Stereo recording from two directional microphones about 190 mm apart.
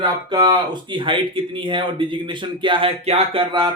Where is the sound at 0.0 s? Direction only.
25° right (ahead or behind).